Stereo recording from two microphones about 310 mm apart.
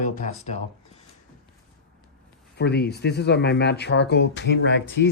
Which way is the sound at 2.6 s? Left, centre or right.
Left.